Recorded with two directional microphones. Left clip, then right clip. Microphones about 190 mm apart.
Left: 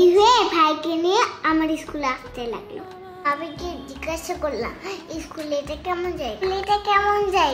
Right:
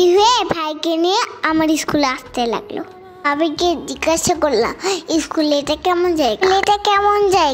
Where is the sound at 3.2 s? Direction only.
45° right (ahead or behind).